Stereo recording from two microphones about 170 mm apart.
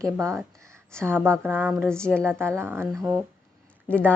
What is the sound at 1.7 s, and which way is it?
Speech, centre (ahead or behind).